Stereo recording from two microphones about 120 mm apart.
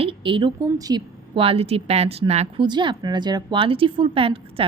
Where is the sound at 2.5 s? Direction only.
40° right (ahead or behind).